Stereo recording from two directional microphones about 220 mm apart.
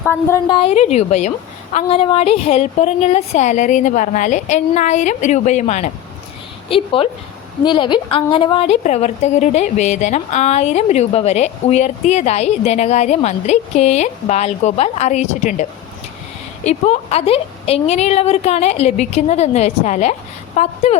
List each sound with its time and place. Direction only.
0.1 s a woman's voice: 10° left (ahead or behind); by 15.6 s 35° left (ahead or behind)
16.6 s a woman's voice: 30° left (ahead or behind)